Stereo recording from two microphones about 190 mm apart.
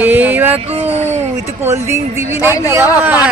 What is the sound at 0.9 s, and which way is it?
Speech, 35° right (ahead or behind).